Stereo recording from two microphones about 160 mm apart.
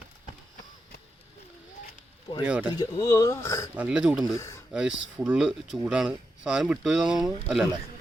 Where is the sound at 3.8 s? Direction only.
5° right (ahead or behind).